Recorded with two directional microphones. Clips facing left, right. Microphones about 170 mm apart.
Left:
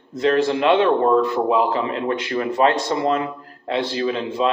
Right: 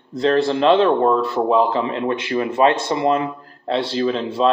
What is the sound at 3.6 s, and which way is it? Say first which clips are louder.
Speech: right 2 dB; 35° right (ahead or behind).